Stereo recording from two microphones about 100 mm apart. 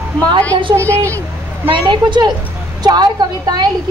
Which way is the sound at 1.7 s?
55° right (ahead or behind).